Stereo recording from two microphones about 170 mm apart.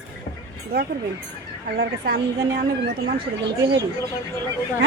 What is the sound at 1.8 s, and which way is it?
Speech, 75° right (ahead or behind).